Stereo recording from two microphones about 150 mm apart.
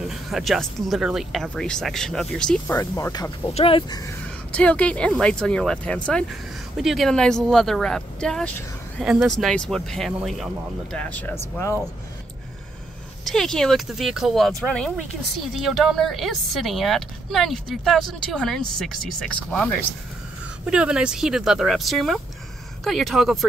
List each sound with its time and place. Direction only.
0.0 s speech: centre (ahead or behind)
2.8 s speech: 20° left (ahead or behind)
3.5 s speech: 35° left (ahead or behind)
4.5 s speech: 10° left (ahead or behind)
13.2 s speech: 5° left (ahead or behind)
20.6 s speech: 5° right (ahead or behind)